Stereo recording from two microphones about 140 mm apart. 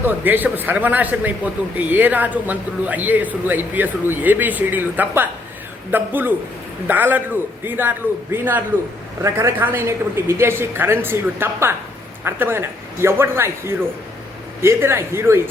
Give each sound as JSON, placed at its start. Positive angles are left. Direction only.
{"t": 0.0, "sound": "speech", "side_deg": -15}